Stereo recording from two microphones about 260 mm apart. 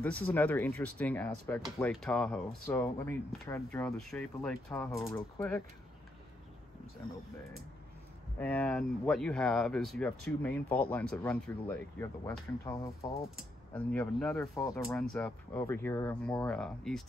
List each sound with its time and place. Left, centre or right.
0.0 s speech: centre
8.4 s speech: centre